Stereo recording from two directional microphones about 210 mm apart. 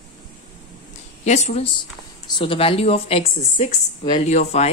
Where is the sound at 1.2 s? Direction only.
35° left (ahead or behind).